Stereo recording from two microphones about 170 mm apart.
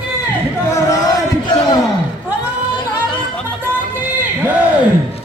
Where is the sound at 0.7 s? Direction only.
20° left (ahead or behind).